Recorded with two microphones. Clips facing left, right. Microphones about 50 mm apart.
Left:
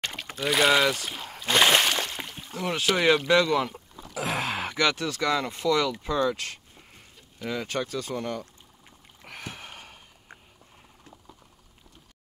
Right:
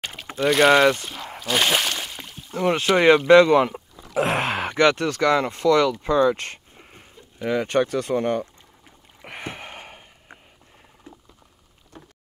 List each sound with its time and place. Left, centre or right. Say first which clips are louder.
0.0 s pour: right 6 dB; centre
0.5 s speech: right 6 dB; centre
1.5 s a sound: left 1 dB; centre
2.5 s speech: right 7 dB; right
5.6 s speech: right 6 dB; centre
6.0 s speech: right 7 dB; right
9.2 s a sound: right 6 dB; right
11.9 s vehicle: right 15 dB; right